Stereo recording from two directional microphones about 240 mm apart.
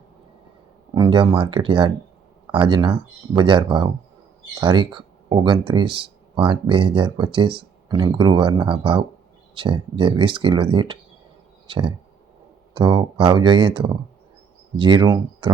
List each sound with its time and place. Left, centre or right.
0.9 s speech: centre